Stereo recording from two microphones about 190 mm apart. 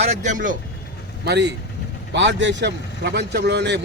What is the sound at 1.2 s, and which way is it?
Speech, 65° right (ahead or behind).